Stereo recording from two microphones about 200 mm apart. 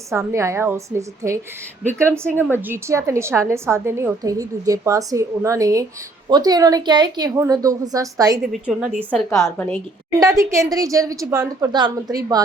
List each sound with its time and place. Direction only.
0.1 s a woman's voice: 15° right (ahead or behind)
8.5 s a woman's voice: 5° right (ahead or behind)
9.3 s a woman's voice: 10° left (ahead or behind)
10.2 s a woman's voice: 15° right (ahead or behind)